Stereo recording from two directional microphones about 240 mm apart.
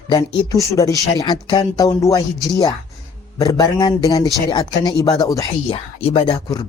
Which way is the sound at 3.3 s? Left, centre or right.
Centre.